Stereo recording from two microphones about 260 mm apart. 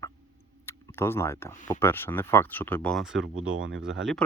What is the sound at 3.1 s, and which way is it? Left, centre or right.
Speech, right.